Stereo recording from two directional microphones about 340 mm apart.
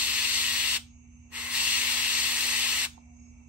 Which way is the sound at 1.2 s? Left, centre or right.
Centre.